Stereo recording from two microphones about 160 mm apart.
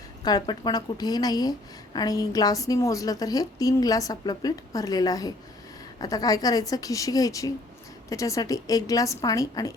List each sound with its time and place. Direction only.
0.3 s a woman's voice: 25° left (ahead or behind)